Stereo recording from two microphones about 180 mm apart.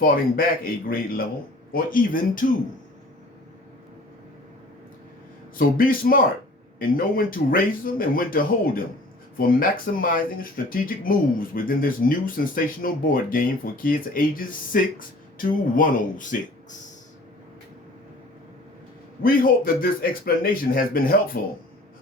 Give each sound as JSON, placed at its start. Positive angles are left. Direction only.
{"t": 0.0, "sound": "speech", "side_deg": 50}
{"t": 5.5, "sound": "speech", "side_deg": 50}
{"t": 19.2, "sound": "speech", "side_deg": 50}